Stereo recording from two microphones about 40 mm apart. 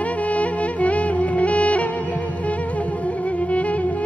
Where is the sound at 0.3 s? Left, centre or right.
Left.